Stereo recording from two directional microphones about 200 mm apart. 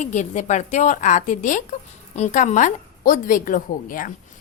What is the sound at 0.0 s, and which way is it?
A woman's voice, 35° left (ahead or behind).